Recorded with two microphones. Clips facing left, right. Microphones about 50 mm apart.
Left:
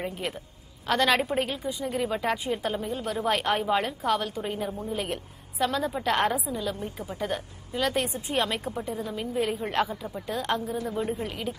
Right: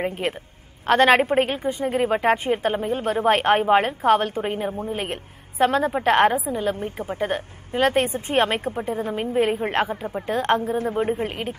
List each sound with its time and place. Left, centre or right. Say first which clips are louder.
0.0 s a woman's voice: right 7 dB; right